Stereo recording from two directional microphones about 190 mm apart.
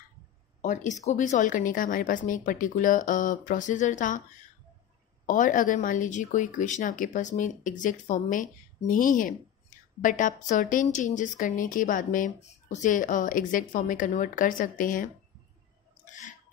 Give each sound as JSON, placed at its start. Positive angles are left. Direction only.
{"t": 0.6, "sound": "a woman's voice", "side_deg": 40}
{"t": 5.2, "sound": "a woman's voice", "side_deg": 45}
{"t": 16.1, "sound": "a sound", "side_deg": 40}